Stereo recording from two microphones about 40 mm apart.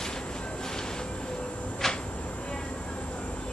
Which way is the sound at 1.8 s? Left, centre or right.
Centre.